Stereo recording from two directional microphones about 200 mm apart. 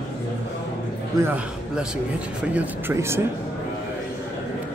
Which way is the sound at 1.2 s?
10° right (ahead or behind).